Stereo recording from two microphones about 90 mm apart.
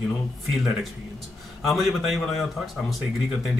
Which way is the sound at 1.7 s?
Centre (ahead or behind).